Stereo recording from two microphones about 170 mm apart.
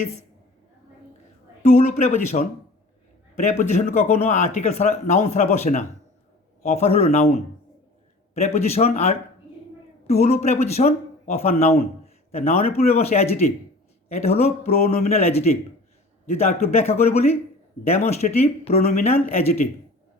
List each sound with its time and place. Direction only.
1.6 s a man's voice: 40° left (ahead or behind)
3.4 s a man's voice: 45° left (ahead or behind)